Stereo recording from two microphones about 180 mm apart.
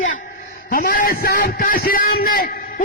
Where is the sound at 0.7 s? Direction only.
55° left (ahead or behind).